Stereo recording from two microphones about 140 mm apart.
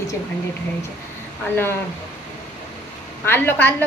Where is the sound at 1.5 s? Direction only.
15° left (ahead or behind).